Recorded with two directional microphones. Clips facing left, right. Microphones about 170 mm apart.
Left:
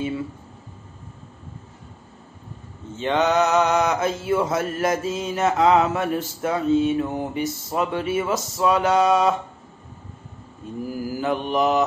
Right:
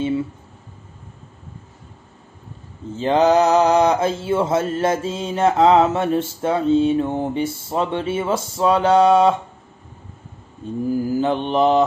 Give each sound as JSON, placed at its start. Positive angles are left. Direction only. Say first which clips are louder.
{"t": 3.0, "sound": "mantra", "louder": "right 5 dB", "side_deg": -35}
{"t": 10.9, "sound": "mantra", "louder": "right 6 dB", "side_deg": -25}